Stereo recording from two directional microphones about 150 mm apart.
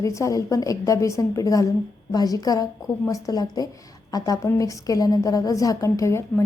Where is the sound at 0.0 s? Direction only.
20° left (ahead or behind).